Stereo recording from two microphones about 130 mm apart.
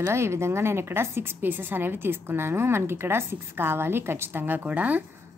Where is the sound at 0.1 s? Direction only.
20° right (ahead or behind).